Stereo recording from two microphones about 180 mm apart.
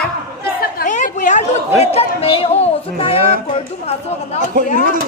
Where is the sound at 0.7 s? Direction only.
45° left (ahead or behind).